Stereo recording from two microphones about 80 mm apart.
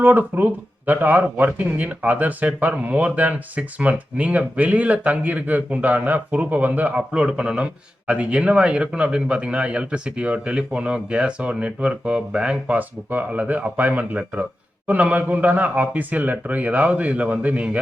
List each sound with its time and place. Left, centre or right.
0.0 s speech: right